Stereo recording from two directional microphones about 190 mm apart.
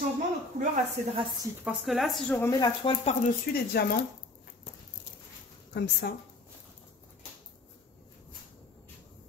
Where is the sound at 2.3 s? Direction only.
15° left (ahead or behind).